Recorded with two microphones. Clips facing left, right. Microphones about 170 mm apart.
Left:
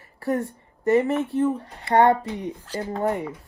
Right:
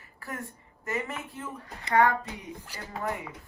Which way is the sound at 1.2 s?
70° left (ahead or behind).